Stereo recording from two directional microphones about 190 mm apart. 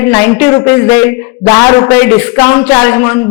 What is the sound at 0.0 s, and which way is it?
A man's voice, 10° left (ahead or behind).